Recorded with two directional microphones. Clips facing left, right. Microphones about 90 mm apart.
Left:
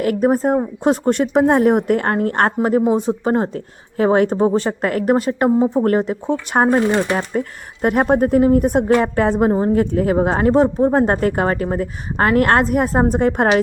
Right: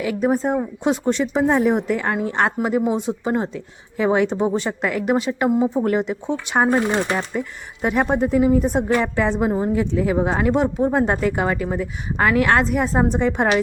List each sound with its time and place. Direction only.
0.0 s speech: 50° left (ahead or behind)
0.9 s speech: 55° left (ahead or behind)
2.6 s speech: 35° left (ahead or behind)
5.5 s speech: 35° left (ahead or behind)
5.8 s speech: 45° left (ahead or behind)